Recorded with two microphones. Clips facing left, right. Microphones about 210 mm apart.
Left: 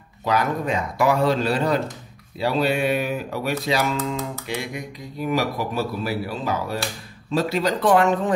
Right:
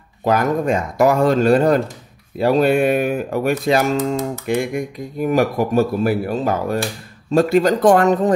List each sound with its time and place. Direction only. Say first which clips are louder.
0.2 s speech: right 5 dB; 45° right (ahead or behind)
3.9 s speech: right 7 dB; 40° right (ahead or behind)
4.5 s speech: right 9 dB; 50° right (ahead or behind)